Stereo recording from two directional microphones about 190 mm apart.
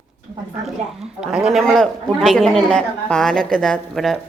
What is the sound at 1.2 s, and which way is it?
A man's voice, 5° right (ahead or behind).